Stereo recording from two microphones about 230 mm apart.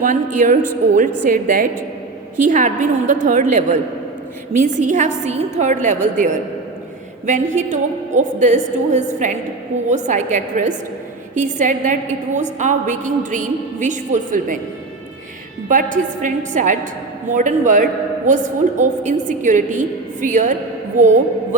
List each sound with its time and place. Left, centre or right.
0.0 s a woman's voice: right
15.7 s a woman's voice: right